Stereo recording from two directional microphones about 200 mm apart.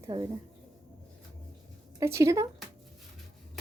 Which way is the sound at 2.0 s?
15° right (ahead or behind).